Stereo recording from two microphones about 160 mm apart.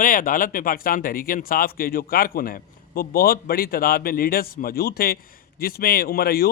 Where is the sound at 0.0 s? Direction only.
60° left (ahead or behind).